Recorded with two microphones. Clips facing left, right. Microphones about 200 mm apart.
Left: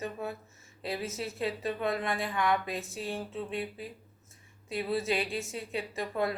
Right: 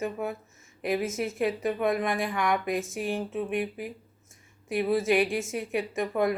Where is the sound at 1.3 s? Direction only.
15° right (ahead or behind).